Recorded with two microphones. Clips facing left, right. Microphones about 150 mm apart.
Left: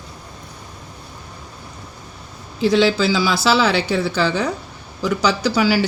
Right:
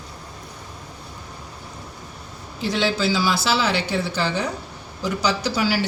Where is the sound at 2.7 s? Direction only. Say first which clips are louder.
Left 5 dB; 90° left.